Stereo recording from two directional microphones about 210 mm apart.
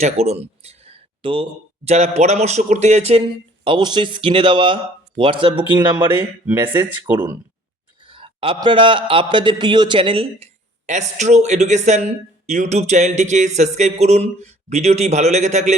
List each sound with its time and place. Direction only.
0.0 s speech: 30° right (ahead or behind)
6.1 s speech: 10° right (ahead or behind)
8.0 s speech: 25° right (ahead or behind)